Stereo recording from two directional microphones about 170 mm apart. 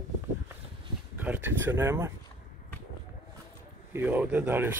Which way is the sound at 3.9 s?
10° right (ahead or behind).